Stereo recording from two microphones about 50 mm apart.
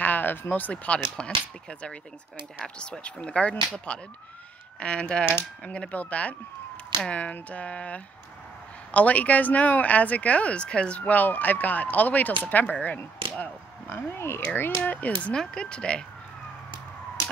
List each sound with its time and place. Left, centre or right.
0.0 s speech: left
0.9 s speech: centre; by 13.0 s left
13.8 s speech: left
14.8 s speech: left
15.3 s speech: centre